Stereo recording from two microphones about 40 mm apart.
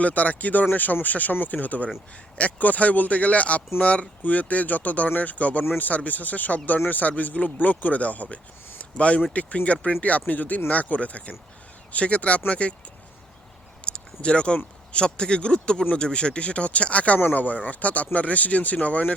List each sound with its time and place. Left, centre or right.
0.0 s speech: left
8.8 s a sound: left
9.3 s speech: left
13.8 s speech: left